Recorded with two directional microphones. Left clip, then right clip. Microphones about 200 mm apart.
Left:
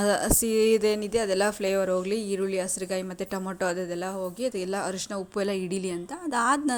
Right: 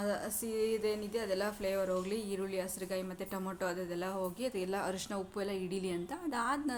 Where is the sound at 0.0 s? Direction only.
45° left (ahead or behind).